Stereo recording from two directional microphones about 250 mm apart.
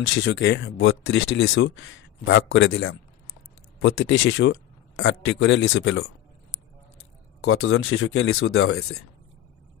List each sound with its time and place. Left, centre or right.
0.0 s speech: left
7.4 s speech: left